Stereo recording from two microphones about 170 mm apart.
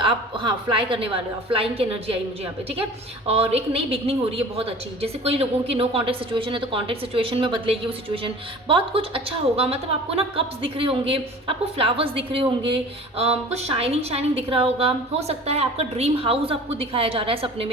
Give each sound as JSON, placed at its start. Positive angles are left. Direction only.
{"t": 0.0, "sound": "a woman's voice", "side_deg": -30}
{"t": 3.2, "sound": "a woman's voice", "side_deg": -35}